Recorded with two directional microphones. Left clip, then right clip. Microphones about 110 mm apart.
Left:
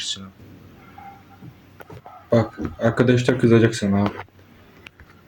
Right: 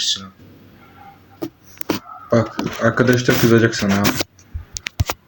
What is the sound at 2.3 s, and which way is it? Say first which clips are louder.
Speech: right 2 dB; 20° left (ahead or behind).